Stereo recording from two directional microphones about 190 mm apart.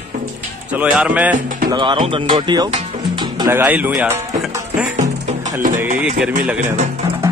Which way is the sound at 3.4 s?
10° right (ahead or behind).